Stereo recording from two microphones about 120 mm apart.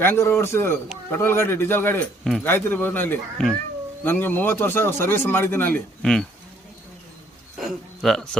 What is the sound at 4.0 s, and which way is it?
Speech, 15° left (ahead or behind).